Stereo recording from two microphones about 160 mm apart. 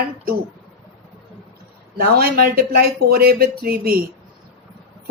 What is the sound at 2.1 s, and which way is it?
Speech, 75° right (ahead or behind).